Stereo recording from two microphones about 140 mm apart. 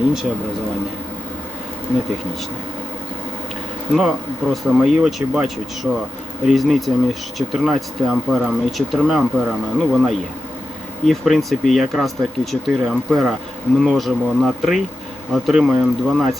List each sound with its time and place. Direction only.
3.9 s speech: centre (ahead or behind)